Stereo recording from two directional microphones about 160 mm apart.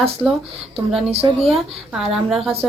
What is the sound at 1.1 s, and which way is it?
Speech, 40° right (ahead or behind).